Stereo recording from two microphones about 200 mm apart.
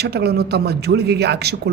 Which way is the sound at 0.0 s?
55° right (ahead or behind).